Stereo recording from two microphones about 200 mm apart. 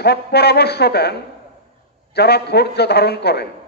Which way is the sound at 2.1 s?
55° left (ahead or behind).